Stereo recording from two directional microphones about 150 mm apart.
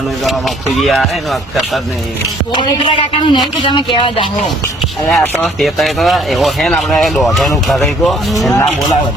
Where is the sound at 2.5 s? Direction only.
30° left (ahead or behind).